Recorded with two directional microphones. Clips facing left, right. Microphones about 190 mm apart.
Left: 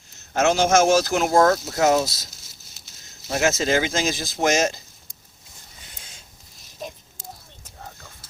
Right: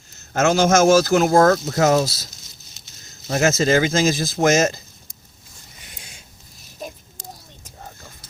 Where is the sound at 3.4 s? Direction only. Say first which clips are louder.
Right 4 dB; 45° right (ahead or behind).